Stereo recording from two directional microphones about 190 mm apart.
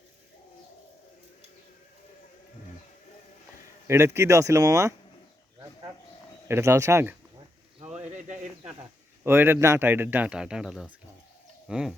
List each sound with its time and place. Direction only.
3.8 s speech: 15° right (ahead or behind)
6.5 s speech: 15° right (ahead or behind)
7.8 s a sound: 10° right (ahead or behind)
9.2 s speech: 10° right (ahead or behind)